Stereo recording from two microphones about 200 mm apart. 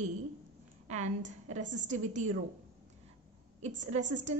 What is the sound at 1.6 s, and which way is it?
Speech, 65° right (ahead or behind).